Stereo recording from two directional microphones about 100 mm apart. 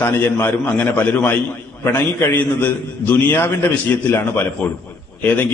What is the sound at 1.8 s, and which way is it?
A man's voice, 25° left (ahead or behind).